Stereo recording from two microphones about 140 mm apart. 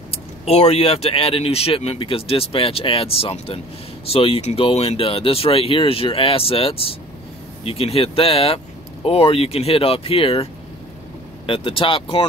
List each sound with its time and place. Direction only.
0.1 s speech: 45° left (ahead or behind)